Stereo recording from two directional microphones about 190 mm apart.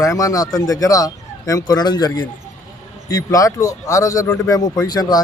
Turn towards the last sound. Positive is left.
turn(degrees=20)  # may be behind; listen again after turning